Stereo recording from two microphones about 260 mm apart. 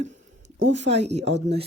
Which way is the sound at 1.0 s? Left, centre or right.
Right.